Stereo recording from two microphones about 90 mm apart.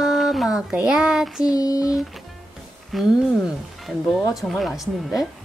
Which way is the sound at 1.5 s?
45° left (ahead or behind).